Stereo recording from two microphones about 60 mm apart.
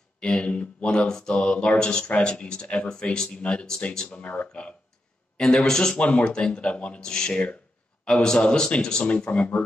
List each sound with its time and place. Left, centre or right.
0.2 s speech: centre
4.2 s speech: left
5.4 s speech: centre